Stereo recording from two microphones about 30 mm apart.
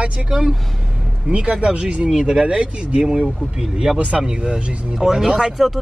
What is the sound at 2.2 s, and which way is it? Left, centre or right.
Speech, right.